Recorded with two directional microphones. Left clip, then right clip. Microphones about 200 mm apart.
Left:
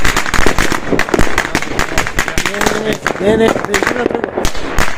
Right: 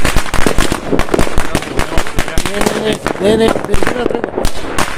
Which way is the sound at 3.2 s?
Centre (ahead or behind).